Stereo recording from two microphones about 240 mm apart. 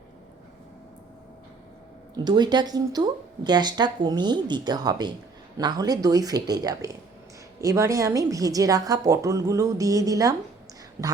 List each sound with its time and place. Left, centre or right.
2.1 s speech: centre